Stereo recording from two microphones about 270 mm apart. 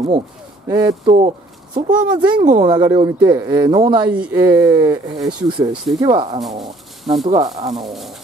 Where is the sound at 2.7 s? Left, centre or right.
Centre.